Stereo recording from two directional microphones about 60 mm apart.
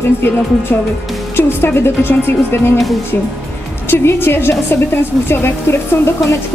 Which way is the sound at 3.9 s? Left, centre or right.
Left.